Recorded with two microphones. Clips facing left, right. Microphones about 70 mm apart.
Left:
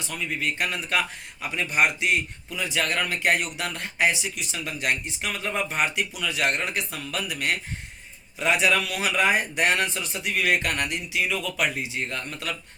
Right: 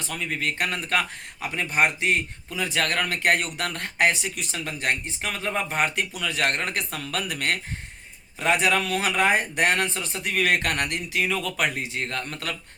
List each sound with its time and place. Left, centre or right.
0.0 s speech: right